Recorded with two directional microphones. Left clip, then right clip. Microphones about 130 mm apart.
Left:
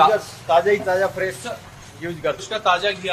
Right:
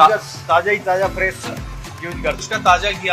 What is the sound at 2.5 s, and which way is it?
Speech, 30° right (ahead or behind).